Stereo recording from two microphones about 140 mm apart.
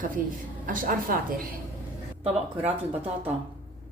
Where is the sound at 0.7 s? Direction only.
90° right.